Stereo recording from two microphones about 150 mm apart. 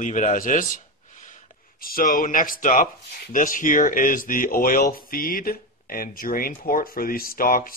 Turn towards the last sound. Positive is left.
turn(degrees=70)  # may be behind; listen again after turning